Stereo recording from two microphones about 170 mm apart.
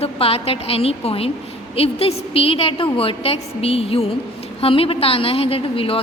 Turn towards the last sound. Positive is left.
turn(degrees=35)  # may be behind; listen again after turning